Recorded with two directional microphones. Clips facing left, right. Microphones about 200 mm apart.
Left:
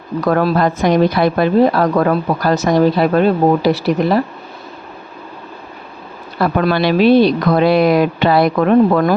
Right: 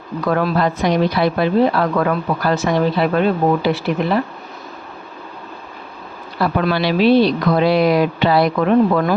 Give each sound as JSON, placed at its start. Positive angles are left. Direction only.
{"t": 0.3, "sound": "a woman's voice", "side_deg": 45}
{"t": 6.4, "sound": "speech", "side_deg": 45}